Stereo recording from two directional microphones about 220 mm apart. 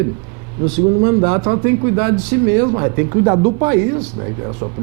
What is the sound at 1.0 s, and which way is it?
A man's voice, 20° right (ahead or behind).